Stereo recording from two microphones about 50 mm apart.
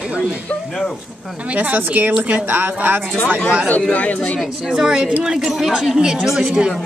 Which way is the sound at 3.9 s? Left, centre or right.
Left.